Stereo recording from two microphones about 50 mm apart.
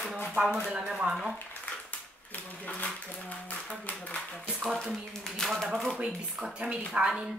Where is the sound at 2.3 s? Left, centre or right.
Left.